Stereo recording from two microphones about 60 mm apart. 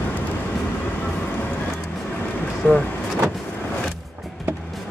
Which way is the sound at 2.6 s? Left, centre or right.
Left.